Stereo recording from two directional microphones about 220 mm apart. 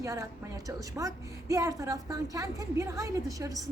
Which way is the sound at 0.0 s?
15° right (ahead or behind).